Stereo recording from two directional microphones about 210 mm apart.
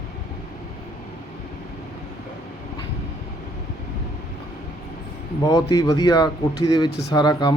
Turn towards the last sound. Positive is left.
turn(degrees=20)  # may be behind; listen again after turning